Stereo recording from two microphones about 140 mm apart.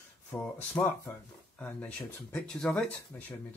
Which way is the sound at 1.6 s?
10° left (ahead or behind).